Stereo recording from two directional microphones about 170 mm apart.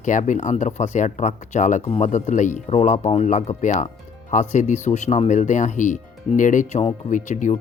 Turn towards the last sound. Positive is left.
turn(degrees=50)  # may be behind; listen again after turning